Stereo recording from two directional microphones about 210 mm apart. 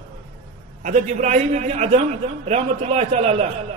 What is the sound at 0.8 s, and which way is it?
A man's voice, 35° right (ahead or behind).